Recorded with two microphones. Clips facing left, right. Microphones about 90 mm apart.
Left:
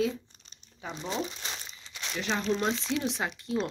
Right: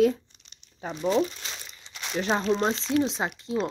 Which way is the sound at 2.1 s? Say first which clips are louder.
Right 5 dB; 40° right (ahead or behind).